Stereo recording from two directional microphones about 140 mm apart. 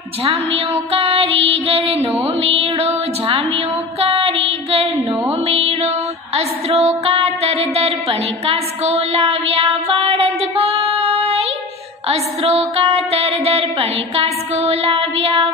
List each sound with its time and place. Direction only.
0.9 s music: 45° right (ahead or behind)
3.3 s a sound: 40° right (ahead or behind)
5.5 s music: 45° right (ahead or behind)